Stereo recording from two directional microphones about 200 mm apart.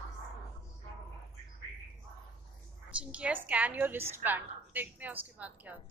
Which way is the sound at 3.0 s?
5° right (ahead or behind).